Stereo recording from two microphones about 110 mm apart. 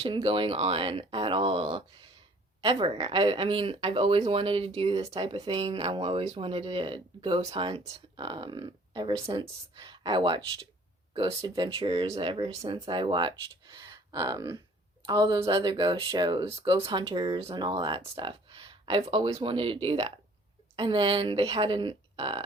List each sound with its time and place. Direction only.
0.0 s speech: 55° right (ahead or behind)
2.6 s speech: 50° right (ahead or behind)
11.1 s speech: 55° right (ahead or behind)
11.4 s speech: 45° right (ahead or behind)
13.8 s a sound: 30° right (ahead or behind)
15.0 s a woman's voice: 35° right (ahead or behind)
17.2 s speech: 55° right (ahead or behind)